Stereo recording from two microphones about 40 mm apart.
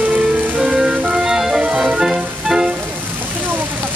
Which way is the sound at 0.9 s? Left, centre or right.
Right.